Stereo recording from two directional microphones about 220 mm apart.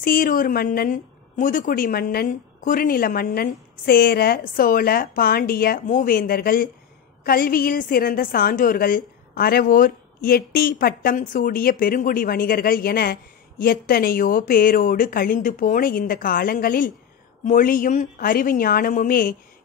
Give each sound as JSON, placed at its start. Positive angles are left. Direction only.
{"t": 0.0, "sound": "a woman's voice", "side_deg": 40}